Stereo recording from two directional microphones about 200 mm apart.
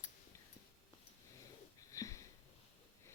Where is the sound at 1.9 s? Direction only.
15° left (ahead or behind).